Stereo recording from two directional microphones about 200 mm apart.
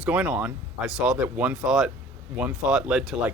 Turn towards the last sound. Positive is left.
turn(degrees=-5)  # may be behind; listen again after turning